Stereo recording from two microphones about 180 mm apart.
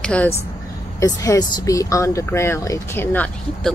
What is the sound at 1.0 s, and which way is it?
Speech, 20° left (ahead or behind).